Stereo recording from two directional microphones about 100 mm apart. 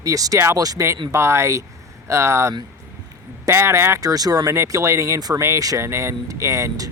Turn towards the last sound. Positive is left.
turn(degrees=-30)  # may be behind; listen again after turning